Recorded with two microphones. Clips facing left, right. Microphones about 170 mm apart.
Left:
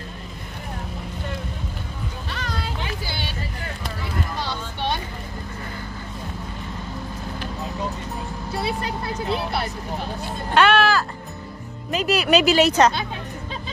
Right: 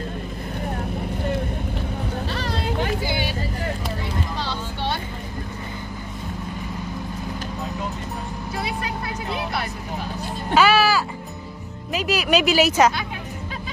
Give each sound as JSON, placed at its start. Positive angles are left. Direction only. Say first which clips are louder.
{"t": 2.3, "sound": "vehicle", "louder": "right 3 dB", "side_deg": -35}
{"t": 3.1, "sound": "vehicle", "louder": "right 6 dB", "side_deg": -15}
{"t": 8.6, "sound": "vehicle", "louder": "left 2 dB", "side_deg": 30}
{"t": 10.5, "sound": "a sound", "louder": "even", "side_deg": -5}
{"t": 11.9, "sound": "speech", "louder": "left 2 dB", "side_deg": 0}